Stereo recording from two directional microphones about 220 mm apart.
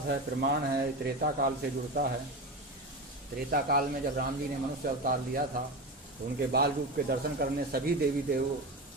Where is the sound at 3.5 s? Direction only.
40° right (ahead or behind).